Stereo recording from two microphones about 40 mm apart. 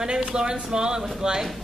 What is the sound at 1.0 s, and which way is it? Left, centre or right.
Speech, centre.